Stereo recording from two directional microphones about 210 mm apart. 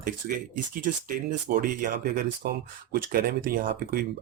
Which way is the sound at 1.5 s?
40° right (ahead or behind).